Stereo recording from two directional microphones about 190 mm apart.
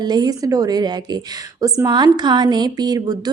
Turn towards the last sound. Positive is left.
turn(degrees=-20)  # may be behind; listen again after turning